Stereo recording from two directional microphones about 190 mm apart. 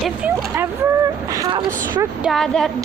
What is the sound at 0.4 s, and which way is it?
Boat, 15° right (ahead or behind).